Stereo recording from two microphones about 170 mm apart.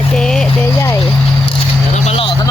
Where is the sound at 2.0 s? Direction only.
35° left (ahead or behind).